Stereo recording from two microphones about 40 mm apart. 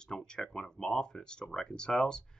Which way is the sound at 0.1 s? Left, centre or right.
Centre.